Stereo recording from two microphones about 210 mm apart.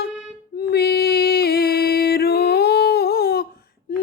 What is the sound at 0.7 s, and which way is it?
Music, 50° left (ahead or behind).